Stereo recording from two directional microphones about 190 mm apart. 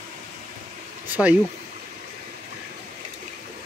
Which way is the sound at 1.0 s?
10° right (ahead or behind).